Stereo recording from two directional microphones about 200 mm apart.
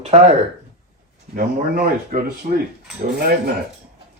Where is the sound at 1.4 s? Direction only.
45° right (ahead or behind).